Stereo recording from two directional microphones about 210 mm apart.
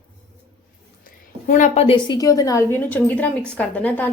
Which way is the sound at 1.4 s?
35° left (ahead or behind).